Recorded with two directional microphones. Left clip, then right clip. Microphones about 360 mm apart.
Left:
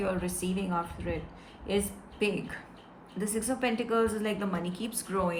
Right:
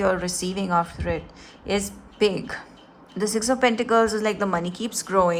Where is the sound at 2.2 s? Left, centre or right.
Centre.